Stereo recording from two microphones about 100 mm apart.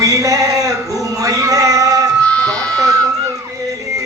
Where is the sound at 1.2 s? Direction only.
35° right (ahead or behind).